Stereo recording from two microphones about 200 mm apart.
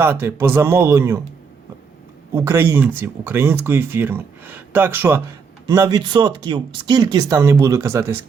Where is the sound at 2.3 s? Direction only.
15° right (ahead or behind).